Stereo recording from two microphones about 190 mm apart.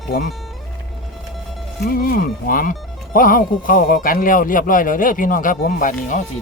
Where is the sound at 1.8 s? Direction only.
50° left (ahead or behind).